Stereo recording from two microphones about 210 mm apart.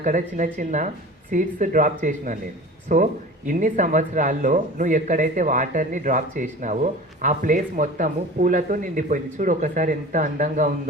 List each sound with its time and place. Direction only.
0.0 s speech: 40° right (ahead or behind)